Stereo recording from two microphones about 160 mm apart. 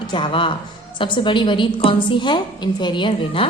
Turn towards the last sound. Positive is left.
turn(degrees=30)  # may be behind; listen again after turning